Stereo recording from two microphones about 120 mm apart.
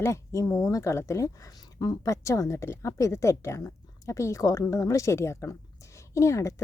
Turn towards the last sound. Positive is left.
turn(degrees=25)  # may be behind; listen again after turning